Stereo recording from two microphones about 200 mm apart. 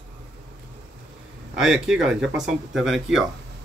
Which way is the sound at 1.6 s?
5° right (ahead or behind).